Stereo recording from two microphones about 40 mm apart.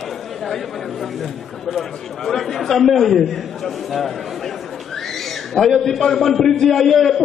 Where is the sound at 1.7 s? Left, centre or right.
Centre.